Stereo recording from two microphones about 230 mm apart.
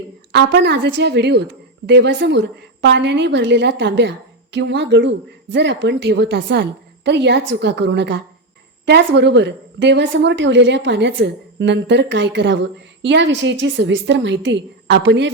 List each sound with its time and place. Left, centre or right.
0.3 s a woman's voice: right